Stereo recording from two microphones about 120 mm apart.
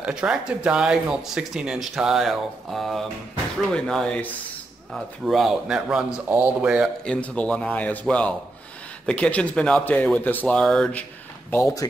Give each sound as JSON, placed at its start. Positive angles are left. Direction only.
{"t": 0.0, "sound": "speech", "side_deg": -5}
{"t": 6.2, "sound": "a man's voice", "side_deg": -15}
{"t": 6.6, "sound": "a man's voice", "side_deg": -5}
{"t": 7.1, "sound": "speech", "side_deg": 10}
{"t": 11.5, "sound": "speech", "side_deg": 30}